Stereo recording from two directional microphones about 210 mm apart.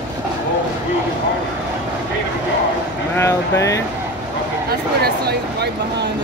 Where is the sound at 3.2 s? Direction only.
15° left (ahead or behind).